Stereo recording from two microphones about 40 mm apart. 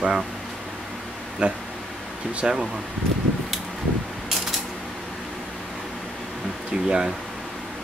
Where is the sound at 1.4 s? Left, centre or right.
Right.